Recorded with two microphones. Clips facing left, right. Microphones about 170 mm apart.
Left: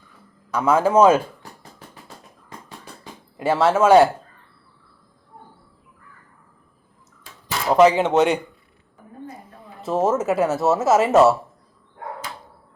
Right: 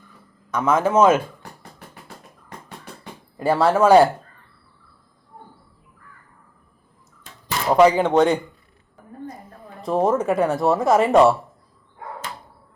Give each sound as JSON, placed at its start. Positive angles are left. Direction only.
{"t": 0.5, "sound": "speech", "side_deg": 10}
{"t": 3.4, "sound": "speech", "side_deg": 5}
{"t": 7.9, "sound": "speech", "side_deg": 20}
{"t": 8.1, "sound": "speech", "side_deg": 10}
{"t": 9.8, "sound": "speech", "side_deg": 5}